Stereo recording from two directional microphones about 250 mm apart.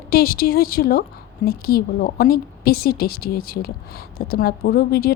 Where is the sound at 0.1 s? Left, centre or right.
Left.